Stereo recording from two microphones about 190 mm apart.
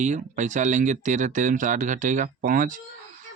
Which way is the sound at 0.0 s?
40° right (ahead or behind).